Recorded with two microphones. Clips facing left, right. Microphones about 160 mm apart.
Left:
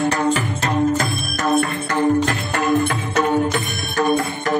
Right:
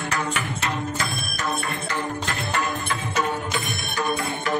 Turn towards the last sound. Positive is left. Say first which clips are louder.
# left 7 dB
turn(degrees=50)  # may be behind; listen again after turning